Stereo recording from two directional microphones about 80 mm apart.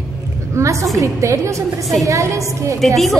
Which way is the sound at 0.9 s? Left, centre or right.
Right.